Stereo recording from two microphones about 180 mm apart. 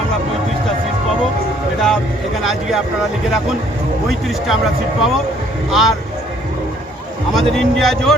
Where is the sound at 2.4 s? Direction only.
Centre (ahead or behind).